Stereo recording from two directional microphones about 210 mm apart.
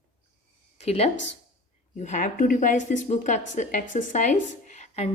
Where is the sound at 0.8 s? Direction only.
30° left (ahead or behind).